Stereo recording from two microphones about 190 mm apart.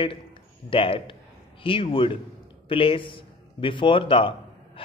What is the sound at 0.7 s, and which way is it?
A man's voice, 30° left (ahead or behind).